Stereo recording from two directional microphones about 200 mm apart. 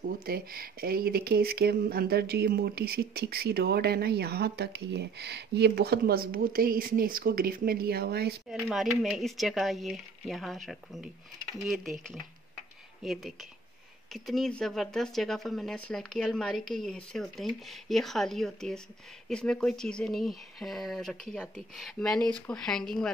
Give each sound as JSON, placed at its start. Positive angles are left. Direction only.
{"t": 0.0, "sound": "speech", "side_deg": -45}
{"t": 8.5, "sound": "speech", "side_deg": 0}